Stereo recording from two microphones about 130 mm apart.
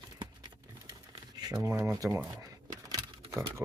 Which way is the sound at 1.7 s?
25° right (ahead or behind).